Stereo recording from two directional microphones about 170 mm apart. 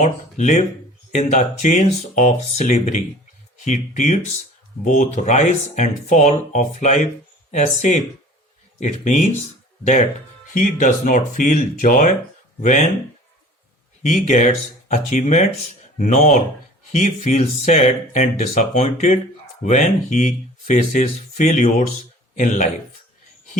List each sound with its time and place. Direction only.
0.0 s speech: 45° left (ahead or behind)
10.5 s speech: 50° left (ahead or behind)
14.0 s speech: 45° left (ahead or behind)